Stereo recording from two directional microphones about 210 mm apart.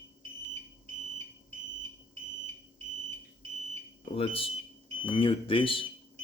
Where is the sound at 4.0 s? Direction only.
25° left (ahead or behind).